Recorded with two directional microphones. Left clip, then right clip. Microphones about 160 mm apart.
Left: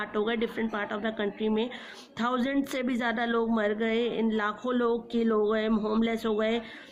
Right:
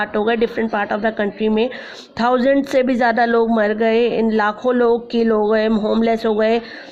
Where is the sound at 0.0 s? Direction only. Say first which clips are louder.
Right 12 dB; 40° right (ahead or behind).